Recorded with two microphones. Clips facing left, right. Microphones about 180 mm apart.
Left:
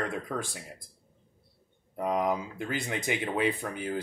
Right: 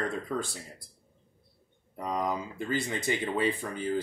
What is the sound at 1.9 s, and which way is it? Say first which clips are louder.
Speech: left 3 dB; 10° left (ahead or behind).